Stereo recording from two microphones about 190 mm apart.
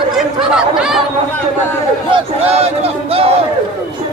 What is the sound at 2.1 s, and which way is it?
Crowd, 30° right (ahead or behind).